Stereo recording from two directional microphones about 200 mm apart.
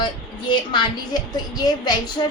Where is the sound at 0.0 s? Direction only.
25° left (ahead or behind).